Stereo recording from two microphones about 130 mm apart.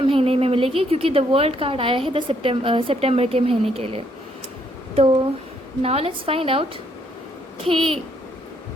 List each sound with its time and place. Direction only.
0.0 s a woman's voice: 45° right (ahead or behind)
5.8 s a woman's voice: 50° right (ahead or behind)